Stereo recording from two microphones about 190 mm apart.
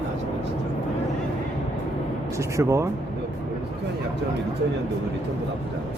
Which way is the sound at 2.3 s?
15° right (ahead or behind).